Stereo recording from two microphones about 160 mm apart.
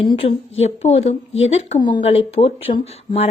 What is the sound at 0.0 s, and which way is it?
Speech, 35° left (ahead or behind).